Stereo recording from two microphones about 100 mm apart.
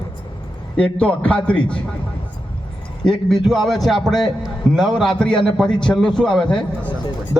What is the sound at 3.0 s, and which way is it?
A man's voice, 5° left (ahead or behind).